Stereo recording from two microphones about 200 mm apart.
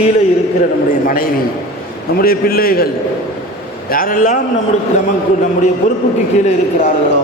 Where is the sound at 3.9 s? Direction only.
45° left (ahead or behind).